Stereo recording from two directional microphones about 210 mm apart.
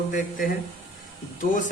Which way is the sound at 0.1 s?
40° left (ahead or behind).